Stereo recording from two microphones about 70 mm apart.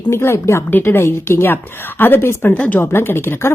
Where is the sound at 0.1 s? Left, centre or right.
Left.